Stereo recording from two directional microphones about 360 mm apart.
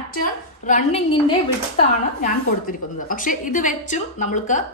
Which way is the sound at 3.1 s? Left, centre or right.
Left.